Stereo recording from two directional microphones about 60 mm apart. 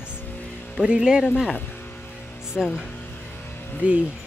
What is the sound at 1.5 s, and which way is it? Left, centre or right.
Music, left.